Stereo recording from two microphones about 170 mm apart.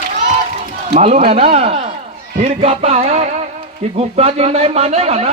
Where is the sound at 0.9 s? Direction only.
40° right (ahead or behind).